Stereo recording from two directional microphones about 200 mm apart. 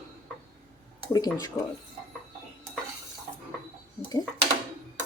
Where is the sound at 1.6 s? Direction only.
15° left (ahead or behind).